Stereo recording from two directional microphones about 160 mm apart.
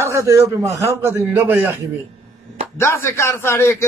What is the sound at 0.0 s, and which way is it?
A man's voice, 15° right (ahead or behind).